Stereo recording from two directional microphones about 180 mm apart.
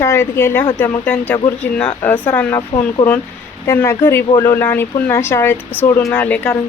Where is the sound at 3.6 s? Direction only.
15° left (ahead or behind).